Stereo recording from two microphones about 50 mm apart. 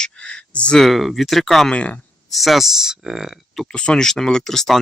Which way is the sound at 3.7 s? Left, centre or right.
Centre.